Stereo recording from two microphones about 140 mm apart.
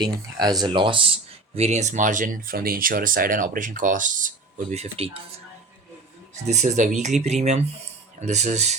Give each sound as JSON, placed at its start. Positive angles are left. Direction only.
{"t": 0.0, "sound": "speech", "side_deg": -30}
{"t": 1.5, "sound": "speech", "side_deg": -50}
{"t": 6.3, "sound": "speech", "side_deg": -55}